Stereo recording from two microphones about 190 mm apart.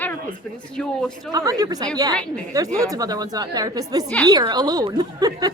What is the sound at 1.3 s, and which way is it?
A woman's voice, 20° right (ahead or behind).